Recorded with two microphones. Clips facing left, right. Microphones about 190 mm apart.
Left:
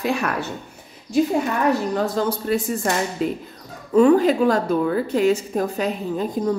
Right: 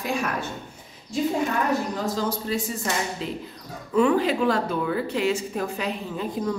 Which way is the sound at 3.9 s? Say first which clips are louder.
Left 6 dB; 40° left (ahead or behind).